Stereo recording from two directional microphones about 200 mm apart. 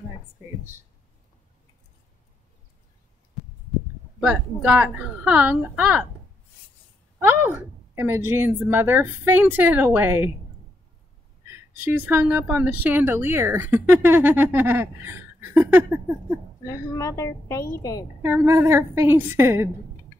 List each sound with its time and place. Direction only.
4.2 s a woman's voice: 5° right (ahead or behind)
7.2 s a woman's voice: 10° right (ahead or behind)
11.5 s a woman's voice: 10° right (ahead or behind)
16.6 s a woman's voice: 15° left (ahead or behind)
18.2 s a woman's voice: 10° right (ahead or behind)